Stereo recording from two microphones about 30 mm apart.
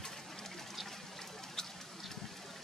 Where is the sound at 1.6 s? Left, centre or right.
Left.